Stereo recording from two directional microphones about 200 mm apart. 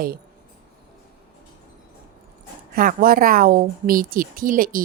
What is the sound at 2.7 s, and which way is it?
Speech, 45° right (ahead or behind).